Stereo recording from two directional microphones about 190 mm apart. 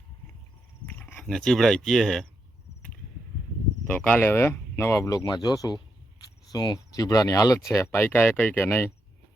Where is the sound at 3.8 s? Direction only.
10° left (ahead or behind).